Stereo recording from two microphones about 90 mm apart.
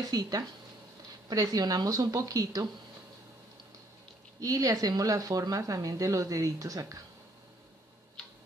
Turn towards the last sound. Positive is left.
turn(degrees=-40)  # may be behind; listen again after turning